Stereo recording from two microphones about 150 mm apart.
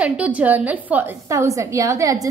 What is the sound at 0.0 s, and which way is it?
A woman's voice, 10° right (ahead or behind).